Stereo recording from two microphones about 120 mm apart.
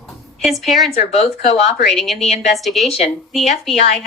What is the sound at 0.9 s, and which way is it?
Speech, 60° left (ahead or behind).